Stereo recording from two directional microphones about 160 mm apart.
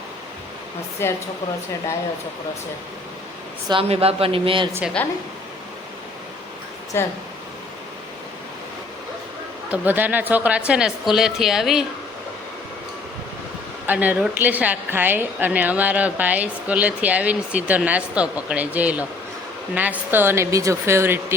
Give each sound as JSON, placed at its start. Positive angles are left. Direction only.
{"t": 1.0, "sound": "a woman's voice", "side_deg": 15}
{"t": 3.7, "sound": "speech", "side_deg": -35}
{"t": 5.0, "sound": "a woman's voice", "side_deg": 10}
{"t": 6.9, "sound": "a woman's voice", "side_deg": 15}
{"t": 9.6, "sound": "a woman's voice", "side_deg": -10}
{"t": 13.8, "sound": "a woman's voice", "side_deg": -10}